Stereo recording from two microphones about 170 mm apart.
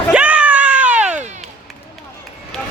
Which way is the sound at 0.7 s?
45° right (ahead or behind).